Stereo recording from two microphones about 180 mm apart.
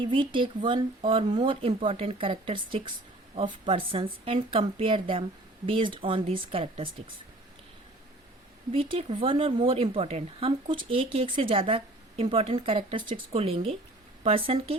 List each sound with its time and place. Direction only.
0.0 s speech: 30° right (ahead or behind)
8.7 s speech: 30° right (ahead or behind)